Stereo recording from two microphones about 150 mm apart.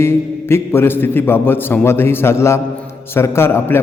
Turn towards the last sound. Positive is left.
turn(degrees=15)  # may be behind; listen again after turning